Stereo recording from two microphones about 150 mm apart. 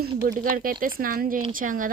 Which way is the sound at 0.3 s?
70° right (ahead or behind).